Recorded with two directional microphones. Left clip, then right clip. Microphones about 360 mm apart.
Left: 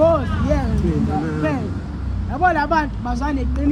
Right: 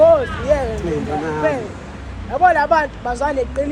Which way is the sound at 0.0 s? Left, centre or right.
Centre.